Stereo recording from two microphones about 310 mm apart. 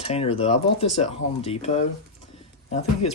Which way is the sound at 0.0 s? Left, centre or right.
Centre.